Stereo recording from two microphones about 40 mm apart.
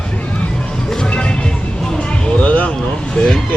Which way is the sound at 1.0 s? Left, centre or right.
Left.